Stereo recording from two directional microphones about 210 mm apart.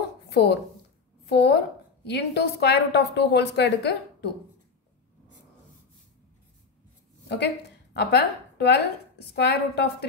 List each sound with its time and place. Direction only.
0.3 s a woman's voice: 50° left (ahead or behind)
7.2 s a woman's voice: 50° left (ahead or behind)